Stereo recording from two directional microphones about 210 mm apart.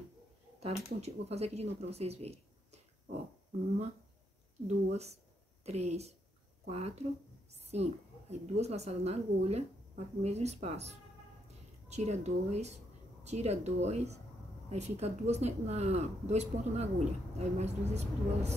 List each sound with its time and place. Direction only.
0.6 s speech: 30° right (ahead or behind)
4.9 s a woman's voice: 30° right (ahead or behind)
11.9 s a woman's voice: 30° right (ahead or behind)